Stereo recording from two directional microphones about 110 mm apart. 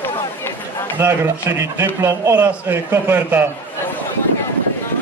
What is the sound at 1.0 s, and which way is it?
A man's voice, 25° right (ahead or behind).